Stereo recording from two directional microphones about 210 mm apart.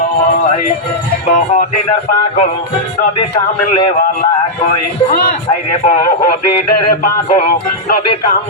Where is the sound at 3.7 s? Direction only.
30° left (ahead or behind).